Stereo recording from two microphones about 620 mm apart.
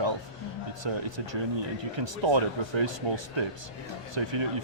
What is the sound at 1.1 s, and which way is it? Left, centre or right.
Speech, right.